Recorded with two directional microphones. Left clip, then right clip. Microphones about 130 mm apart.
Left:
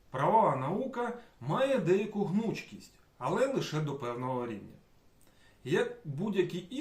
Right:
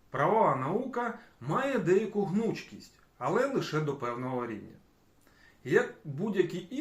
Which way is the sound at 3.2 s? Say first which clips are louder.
Right 1 dB; 25° left (ahead or behind).